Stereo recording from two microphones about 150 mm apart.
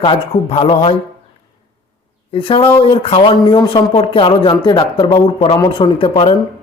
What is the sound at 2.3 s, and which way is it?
Speech, 35° left (ahead or behind).